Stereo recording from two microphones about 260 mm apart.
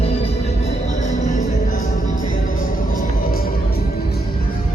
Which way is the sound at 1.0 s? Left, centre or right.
Left.